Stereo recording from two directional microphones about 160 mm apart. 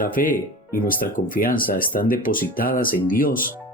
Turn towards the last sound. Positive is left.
turn(degrees=60)  # may be behind; listen again after turning